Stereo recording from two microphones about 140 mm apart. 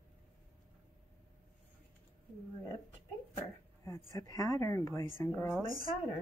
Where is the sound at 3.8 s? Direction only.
20° left (ahead or behind).